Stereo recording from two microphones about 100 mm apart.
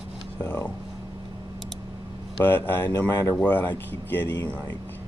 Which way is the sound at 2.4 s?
20° left (ahead or behind).